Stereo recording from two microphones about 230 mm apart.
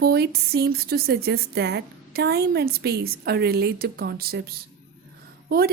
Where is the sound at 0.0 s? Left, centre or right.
Right.